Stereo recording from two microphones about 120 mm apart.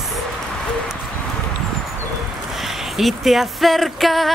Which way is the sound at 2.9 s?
Centre (ahead or behind).